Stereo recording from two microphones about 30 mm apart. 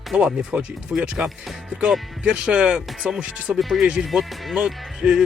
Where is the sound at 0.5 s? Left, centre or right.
Right.